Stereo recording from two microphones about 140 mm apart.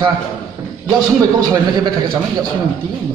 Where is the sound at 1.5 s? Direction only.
30° right (ahead or behind).